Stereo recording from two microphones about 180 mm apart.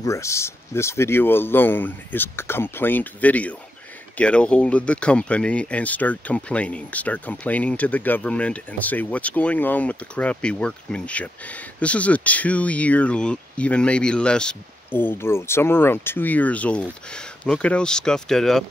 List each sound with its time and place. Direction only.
0.0 s speech: 15° left (ahead or behind)